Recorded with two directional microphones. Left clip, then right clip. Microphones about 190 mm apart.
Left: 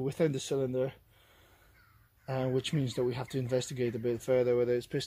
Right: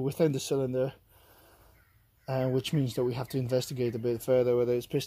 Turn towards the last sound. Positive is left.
turn(degrees=-35)  # may be behind; listen again after turning